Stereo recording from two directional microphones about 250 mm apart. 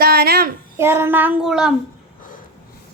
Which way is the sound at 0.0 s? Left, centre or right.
Right.